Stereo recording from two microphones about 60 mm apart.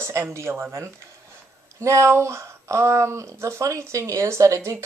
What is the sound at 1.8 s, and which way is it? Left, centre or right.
Speech, right.